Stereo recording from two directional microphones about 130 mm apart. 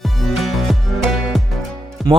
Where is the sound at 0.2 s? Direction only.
Centre (ahead or behind).